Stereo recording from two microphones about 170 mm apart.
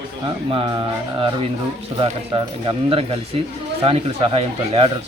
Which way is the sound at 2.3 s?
30° right (ahead or behind).